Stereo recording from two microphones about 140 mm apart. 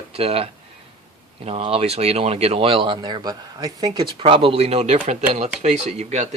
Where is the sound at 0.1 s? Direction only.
45° right (ahead or behind).